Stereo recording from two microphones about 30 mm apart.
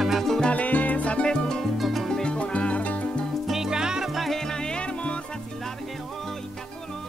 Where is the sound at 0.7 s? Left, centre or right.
Left.